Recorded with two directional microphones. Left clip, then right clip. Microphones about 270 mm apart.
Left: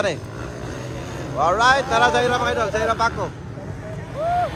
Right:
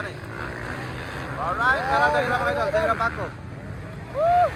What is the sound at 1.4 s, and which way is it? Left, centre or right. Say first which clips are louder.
Speech: left 5 dB; centre.